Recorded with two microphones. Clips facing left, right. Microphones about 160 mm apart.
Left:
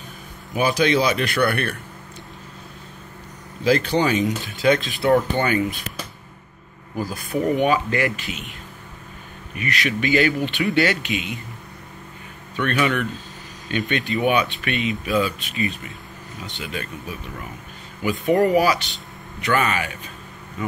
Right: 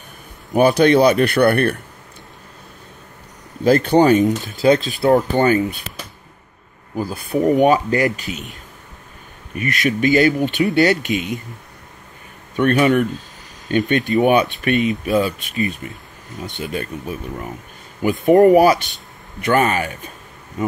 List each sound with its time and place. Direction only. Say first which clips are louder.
0.5 s a man's voice: right 7 dB; 55° right (ahead or behind)
3.6 s speech: right 6 dB; 50° right (ahead or behind)
4.5 s speech: right 4 dB; 40° right (ahead or behind)
7.0 s speech: right 3 dB; 25° right (ahead or behind)
7.4 s speech: right 6 dB; 40° right (ahead or behind)
9.6 s speech: right 5 dB; 45° right (ahead or behind)
12.5 s speech: right 7 dB; 40° right (ahead or behind)
18.0 s speech: right 7 dB; 50° right (ahead or behind)